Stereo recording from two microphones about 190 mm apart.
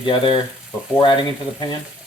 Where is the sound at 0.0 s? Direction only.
25° left (ahead or behind).